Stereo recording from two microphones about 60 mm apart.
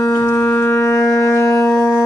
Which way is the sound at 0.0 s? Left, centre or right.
Left.